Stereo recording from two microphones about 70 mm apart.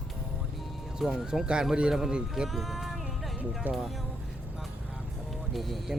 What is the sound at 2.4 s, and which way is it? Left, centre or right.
Music, centre.